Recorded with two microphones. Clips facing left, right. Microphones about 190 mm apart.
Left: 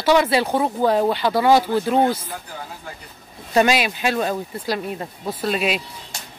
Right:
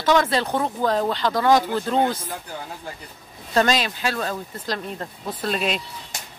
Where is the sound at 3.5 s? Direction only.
10° left (ahead or behind).